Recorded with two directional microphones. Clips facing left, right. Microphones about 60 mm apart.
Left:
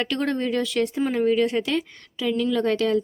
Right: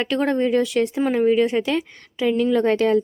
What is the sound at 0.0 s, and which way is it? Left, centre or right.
Speech, centre.